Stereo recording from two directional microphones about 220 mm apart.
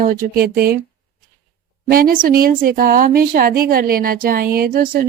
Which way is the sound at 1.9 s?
40° right (ahead or behind).